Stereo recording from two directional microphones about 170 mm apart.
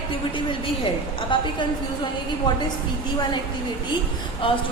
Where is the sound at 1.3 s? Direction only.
30° left (ahead or behind).